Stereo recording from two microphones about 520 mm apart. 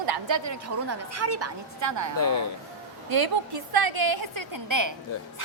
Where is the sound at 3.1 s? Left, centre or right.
Right.